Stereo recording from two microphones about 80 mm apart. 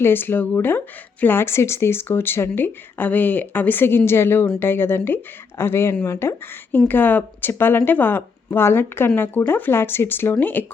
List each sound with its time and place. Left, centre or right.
0.0 s speech: left